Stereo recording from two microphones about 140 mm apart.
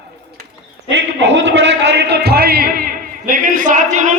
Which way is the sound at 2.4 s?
90° right.